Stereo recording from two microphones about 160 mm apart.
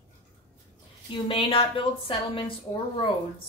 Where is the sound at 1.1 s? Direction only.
30° left (ahead or behind).